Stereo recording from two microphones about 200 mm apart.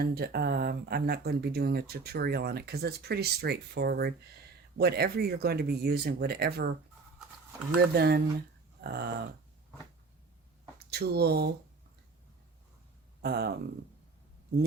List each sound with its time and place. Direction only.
0.0 s speech: 50° right (ahead or behind)
7.8 s speech: 55° right (ahead or behind)
10.9 s speech: 55° right (ahead or behind)
13.2 s speech: 50° right (ahead or behind)